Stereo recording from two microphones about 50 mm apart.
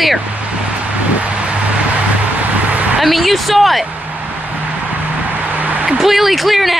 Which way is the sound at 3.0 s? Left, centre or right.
Centre.